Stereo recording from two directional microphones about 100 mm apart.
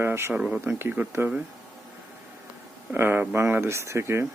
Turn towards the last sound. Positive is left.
turn(degrees=-25)  # may be behind; listen again after turning